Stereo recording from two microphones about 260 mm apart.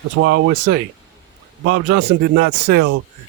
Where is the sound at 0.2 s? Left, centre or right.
Right.